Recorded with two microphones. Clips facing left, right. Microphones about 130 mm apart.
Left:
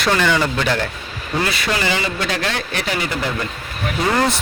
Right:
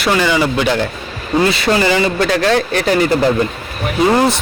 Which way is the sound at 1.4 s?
30° right (ahead or behind).